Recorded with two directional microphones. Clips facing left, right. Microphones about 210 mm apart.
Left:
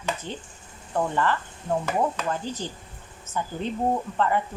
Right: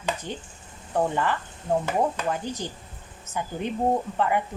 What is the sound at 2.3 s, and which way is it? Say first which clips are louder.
Speech: right 1 dB; 15° right (ahead or behind).